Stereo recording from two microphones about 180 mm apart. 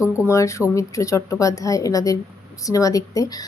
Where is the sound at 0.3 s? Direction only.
15° left (ahead or behind).